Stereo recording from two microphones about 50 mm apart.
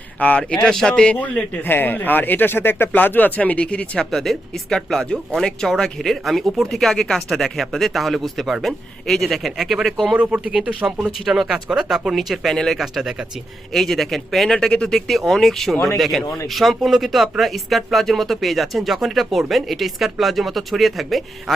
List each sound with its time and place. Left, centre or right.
0.2 s a man's voice: left
0.6 s speech: centre
0.9 s a man's voice: left
1.6 s speech: left
2.9 s speech: left
3.9 s speech: centre
10.2 s speech: right
11.4 s speech: centre
12.5 s speech: centre
12.7 s speech: centre